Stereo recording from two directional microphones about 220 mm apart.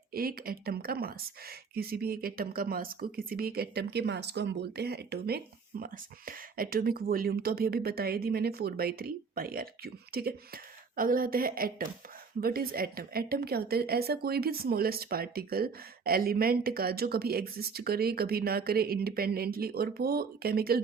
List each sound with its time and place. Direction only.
0.1 s a woman's voice: 40° right (ahead or behind)